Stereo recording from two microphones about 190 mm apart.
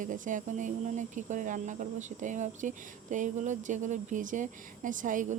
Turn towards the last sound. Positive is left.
turn(degrees=-45)  # may be behind; listen again after turning